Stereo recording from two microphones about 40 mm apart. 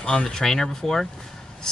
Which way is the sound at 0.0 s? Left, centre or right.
Left.